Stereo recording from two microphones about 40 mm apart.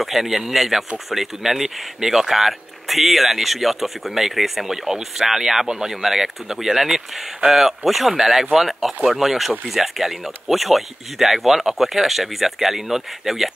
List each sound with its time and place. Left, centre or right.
0.0 s speech: centre